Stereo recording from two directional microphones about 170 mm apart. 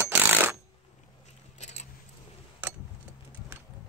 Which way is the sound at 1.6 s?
40° left (ahead or behind).